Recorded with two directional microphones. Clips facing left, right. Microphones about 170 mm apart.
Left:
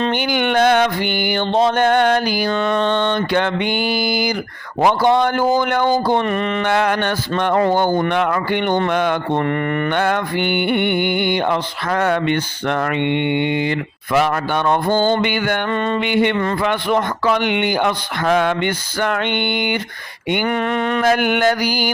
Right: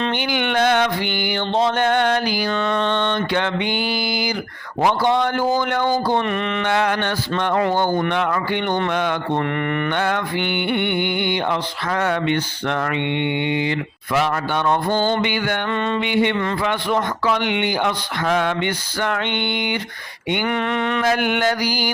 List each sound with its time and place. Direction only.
0.0 s mantra: 45° left (ahead or behind)
20.3 s mantra: 40° left (ahead or behind)